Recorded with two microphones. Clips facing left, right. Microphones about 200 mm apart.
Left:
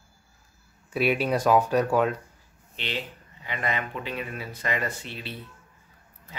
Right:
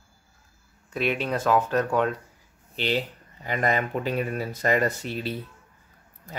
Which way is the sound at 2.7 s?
40° right (ahead or behind).